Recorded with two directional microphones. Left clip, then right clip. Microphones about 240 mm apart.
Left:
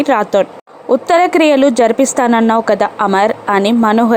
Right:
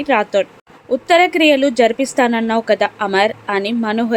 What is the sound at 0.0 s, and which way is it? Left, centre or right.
A woman's voice, centre.